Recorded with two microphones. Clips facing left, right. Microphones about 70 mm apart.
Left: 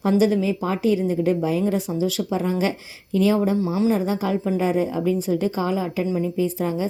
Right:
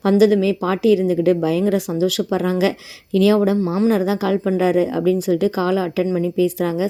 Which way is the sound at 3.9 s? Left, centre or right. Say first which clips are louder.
Right 4 dB; right.